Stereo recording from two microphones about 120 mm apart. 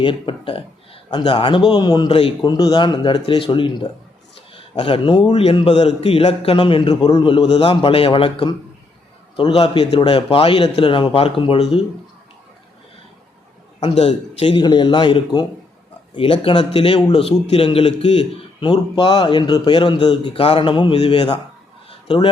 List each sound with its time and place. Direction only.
0.0 s a man's voice: 45° left (ahead or behind)
4.7 s a man's voice: 45° left (ahead or behind)
5.3 s a man's voice: 55° left (ahead or behind)
13.8 s a man's voice: 65° left (ahead or behind)
14.6 s a man's voice: 40° left (ahead or behind)